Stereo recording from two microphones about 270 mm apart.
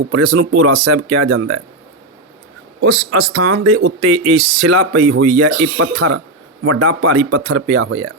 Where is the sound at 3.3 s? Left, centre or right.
Right.